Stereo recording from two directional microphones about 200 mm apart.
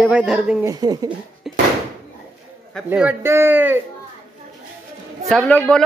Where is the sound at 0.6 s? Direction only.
20° right (ahead or behind).